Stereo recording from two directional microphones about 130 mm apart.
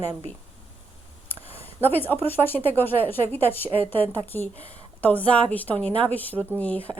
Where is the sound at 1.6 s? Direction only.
15° left (ahead or behind).